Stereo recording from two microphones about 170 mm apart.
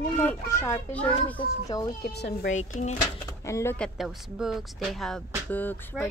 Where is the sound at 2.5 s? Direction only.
40° left (ahead or behind).